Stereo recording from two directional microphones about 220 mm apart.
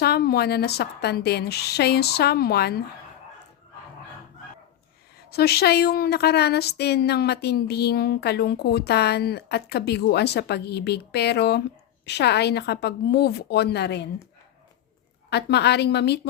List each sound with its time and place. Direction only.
0.0 s a woman's voice: 45° left (ahead or behind)
5.3 s a woman's voice: 45° left (ahead or behind)
15.3 s a woman's voice: 50° left (ahead or behind)